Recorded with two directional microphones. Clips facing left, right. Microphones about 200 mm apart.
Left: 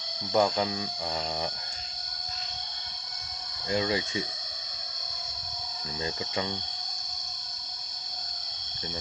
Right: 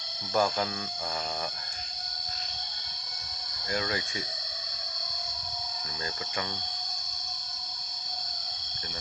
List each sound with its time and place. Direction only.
0.3 s speech: 15° left (ahead or behind)
3.7 s speech: 20° left (ahead or behind)